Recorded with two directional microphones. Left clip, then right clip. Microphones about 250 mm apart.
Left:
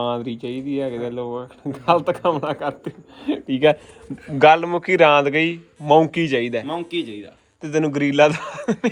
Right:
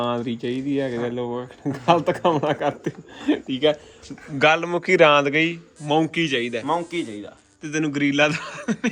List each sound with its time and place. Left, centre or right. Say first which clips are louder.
0.0 s a man's voice: left 1 dB; centre
3.4 s speech: left 6 dB; left
4.4 s a man's voice: left 5 dB; centre; by 6.7 s left
6.7 s speech: right 2 dB; right
7.6 s a man's voice: left 3 dB; centre